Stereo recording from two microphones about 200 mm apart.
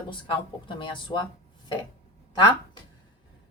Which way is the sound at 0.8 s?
25° left (ahead or behind).